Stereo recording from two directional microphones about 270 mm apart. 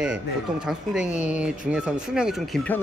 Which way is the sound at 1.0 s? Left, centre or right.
Left.